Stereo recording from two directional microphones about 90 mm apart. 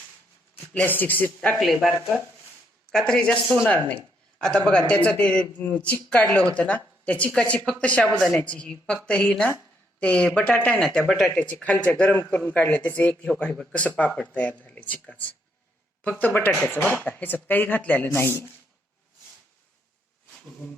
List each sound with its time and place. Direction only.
0.5 s speech: 20° left (ahead or behind)
1.5 s speech: centre (ahead or behind)
4.4 s speech: 10° left (ahead or behind)
16.5 s speech: 10° left (ahead or behind); by 18.5 s 25° left (ahead or behind)